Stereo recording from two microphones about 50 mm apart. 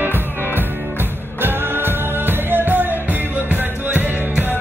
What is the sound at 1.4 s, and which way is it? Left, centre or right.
Music, right.